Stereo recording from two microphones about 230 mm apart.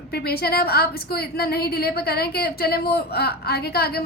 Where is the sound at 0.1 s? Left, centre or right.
Left.